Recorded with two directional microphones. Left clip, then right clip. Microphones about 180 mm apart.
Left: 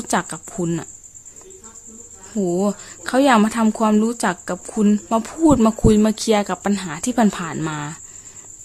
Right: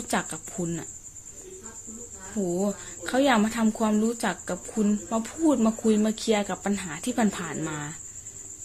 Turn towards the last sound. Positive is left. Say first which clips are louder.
# left 7 dB
turn(degrees=30)  # may be behind; listen again after turning